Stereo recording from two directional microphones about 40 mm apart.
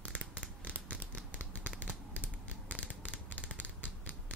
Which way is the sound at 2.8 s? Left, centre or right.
Left.